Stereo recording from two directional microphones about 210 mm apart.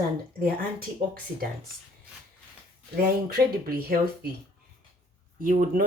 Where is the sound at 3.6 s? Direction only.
45° right (ahead or behind).